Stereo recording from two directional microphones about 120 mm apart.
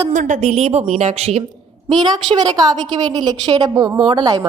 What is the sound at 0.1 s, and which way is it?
A woman's voice, 90° right.